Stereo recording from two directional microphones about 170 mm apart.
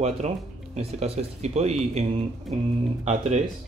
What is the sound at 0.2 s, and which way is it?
Speech, 40° right (ahead or behind).